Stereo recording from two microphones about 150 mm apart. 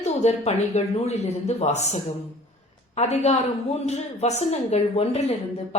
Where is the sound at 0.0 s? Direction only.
45° left (ahead or behind).